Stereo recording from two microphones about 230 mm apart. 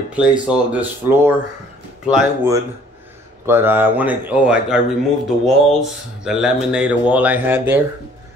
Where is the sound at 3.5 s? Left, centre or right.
Centre.